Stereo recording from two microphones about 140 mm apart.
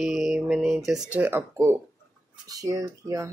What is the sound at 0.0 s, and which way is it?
Mantra, centre (ahead or behind).